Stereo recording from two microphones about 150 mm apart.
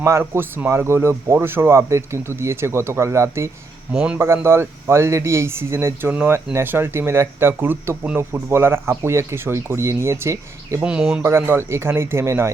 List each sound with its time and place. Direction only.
0.0 s speech: 15° right (ahead or behind)
3.9 s speech: 5° right (ahead or behind)
10.8 s speech: 5° right (ahead or behind)
11.2 s speech: 15° right (ahead or behind)